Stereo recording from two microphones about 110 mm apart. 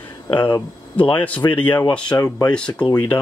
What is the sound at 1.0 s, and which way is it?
Speech, 15° left (ahead or behind).